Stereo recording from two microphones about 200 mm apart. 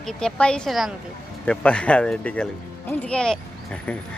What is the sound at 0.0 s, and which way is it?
Speech, 5° left (ahead or behind).